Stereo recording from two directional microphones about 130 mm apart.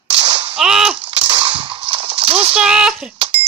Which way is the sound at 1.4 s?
45° right (ahead or behind).